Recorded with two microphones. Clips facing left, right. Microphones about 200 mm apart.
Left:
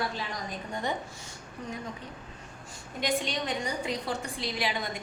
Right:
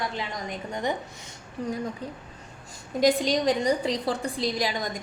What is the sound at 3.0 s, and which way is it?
A woman's voice, 35° right (ahead or behind).